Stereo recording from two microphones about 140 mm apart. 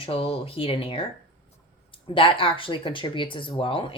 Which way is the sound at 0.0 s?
40° left (ahead or behind).